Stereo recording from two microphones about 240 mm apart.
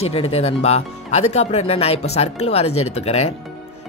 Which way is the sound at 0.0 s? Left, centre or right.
Left.